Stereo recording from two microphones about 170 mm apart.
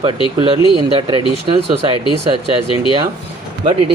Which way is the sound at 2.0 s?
30° left (ahead or behind).